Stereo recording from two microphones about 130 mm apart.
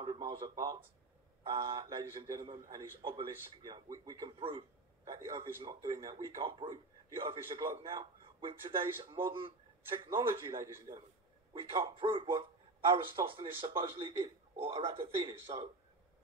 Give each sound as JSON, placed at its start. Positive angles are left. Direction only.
{"t": 0.0, "sound": "a man's voice", "side_deg": -40}
{"t": 4.4, "sound": "a man's voice", "side_deg": -45}
{"t": 7.2, "sound": "a man's voice", "side_deg": -40}